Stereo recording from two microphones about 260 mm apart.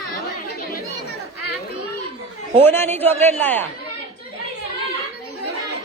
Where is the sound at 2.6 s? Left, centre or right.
Centre.